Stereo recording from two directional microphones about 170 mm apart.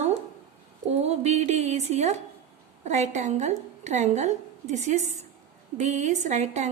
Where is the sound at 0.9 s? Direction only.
40° right (ahead or behind).